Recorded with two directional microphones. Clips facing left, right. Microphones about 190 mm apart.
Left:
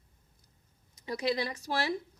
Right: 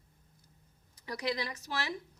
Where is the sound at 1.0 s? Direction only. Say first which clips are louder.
Left 4 dB; 25° left (ahead or behind).